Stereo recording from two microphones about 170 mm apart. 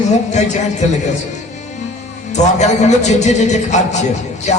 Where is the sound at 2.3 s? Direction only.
45° left (ahead or behind).